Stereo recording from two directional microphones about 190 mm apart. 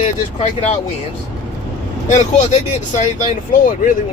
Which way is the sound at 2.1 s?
40° left (ahead or behind).